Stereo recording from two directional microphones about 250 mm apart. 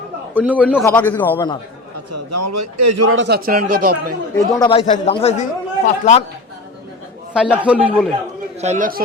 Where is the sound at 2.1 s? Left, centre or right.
Right.